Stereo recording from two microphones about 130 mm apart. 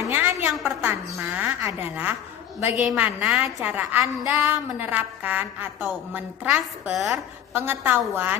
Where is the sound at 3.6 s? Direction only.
15° right (ahead or behind).